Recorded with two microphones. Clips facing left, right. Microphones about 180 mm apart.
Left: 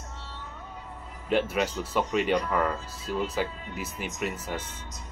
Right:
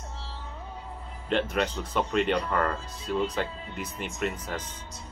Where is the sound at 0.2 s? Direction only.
30° right (ahead or behind).